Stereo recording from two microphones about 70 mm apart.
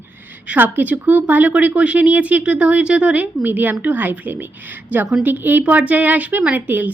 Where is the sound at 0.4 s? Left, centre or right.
Right.